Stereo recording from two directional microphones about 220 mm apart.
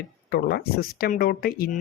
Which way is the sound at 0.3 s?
45° left (ahead or behind).